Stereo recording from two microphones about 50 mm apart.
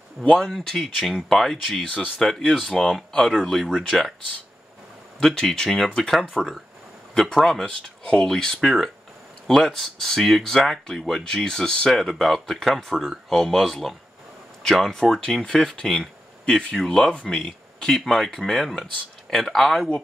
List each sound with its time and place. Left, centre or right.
0.4 s speech: centre
3.6 s speech: centre
5.2 s speech: centre
8.0 s speech: centre
8.3 s speech: centre
16.7 s speech: centre